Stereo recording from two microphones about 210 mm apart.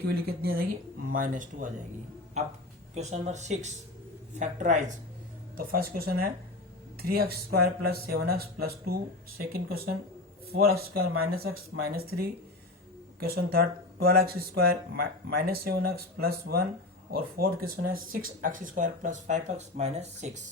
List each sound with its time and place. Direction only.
0.1 s speech: 45° right (ahead or behind)
2.9 s speech: 30° right (ahead or behind)